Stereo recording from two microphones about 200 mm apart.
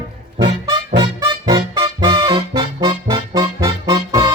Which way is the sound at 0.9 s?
20° right (ahead or behind).